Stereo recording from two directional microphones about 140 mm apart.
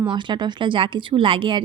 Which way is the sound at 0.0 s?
35° right (ahead or behind).